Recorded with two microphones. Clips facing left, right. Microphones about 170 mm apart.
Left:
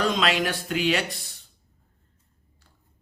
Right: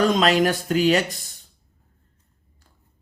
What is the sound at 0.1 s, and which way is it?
A man's voice, 45° right (ahead or behind).